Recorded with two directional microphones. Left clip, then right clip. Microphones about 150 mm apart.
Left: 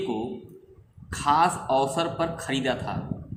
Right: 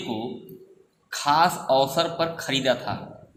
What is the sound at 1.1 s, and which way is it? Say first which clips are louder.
A man's voice: right 1 dB; 35° right (ahead or behind).